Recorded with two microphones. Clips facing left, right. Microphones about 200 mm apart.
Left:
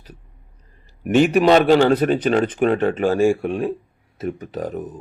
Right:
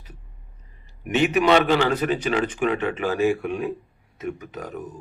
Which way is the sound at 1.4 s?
35° left (ahead or behind).